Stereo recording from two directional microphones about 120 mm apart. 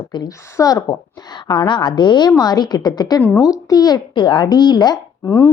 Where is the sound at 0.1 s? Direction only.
35° left (ahead or behind).